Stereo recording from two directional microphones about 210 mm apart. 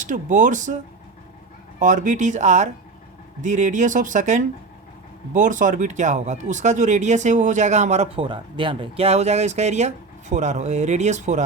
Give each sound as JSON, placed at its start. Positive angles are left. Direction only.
{"t": 0.0, "sound": "speech", "side_deg": -35}
{"t": 1.8, "sound": "speech", "side_deg": -35}